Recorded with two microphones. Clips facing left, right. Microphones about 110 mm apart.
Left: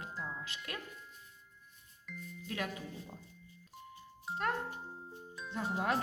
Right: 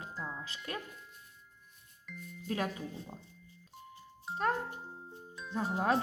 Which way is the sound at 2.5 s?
35° right (ahead or behind).